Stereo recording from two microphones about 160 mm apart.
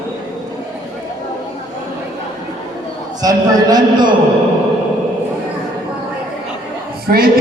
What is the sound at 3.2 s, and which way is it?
Speech, 25° right (ahead or behind).